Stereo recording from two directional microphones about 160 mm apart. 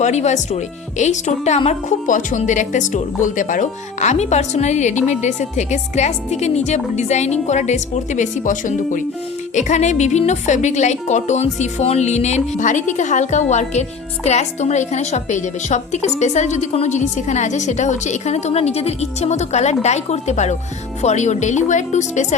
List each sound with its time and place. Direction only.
0.0 s a woman's voice: 45° left (ahead or behind)